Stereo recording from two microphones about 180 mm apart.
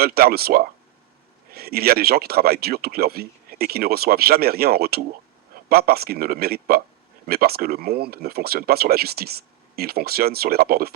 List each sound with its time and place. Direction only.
0.0 s speech: 60° right (ahead or behind)